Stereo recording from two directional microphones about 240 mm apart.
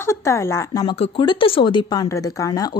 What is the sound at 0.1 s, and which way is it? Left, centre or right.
A woman's voice, centre.